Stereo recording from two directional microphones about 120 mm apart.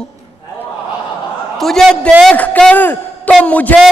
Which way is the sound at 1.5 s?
Centre (ahead or behind).